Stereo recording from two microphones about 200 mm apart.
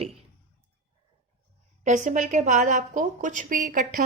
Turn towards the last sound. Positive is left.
turn(degrees=-45)  # may be behind; listen again after turning